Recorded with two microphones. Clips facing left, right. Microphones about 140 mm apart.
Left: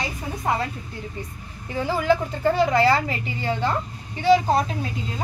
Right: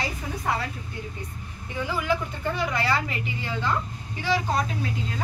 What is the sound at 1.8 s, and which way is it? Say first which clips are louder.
A woman's voice: left 6 dB; 35° left (ahead or behind).